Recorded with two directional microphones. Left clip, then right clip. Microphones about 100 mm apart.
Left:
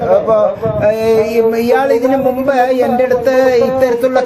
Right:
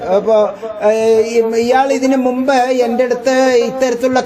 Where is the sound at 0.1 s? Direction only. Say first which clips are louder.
Even; 55° right (ahead or behind).